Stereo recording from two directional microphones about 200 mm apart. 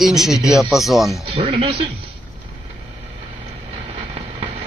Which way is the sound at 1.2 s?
25° right (ahead or behind).